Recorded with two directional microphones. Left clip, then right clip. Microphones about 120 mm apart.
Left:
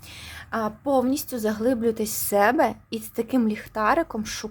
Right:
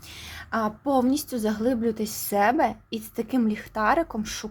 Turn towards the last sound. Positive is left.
turn(degrees=10)  # may be behind; listen again after turning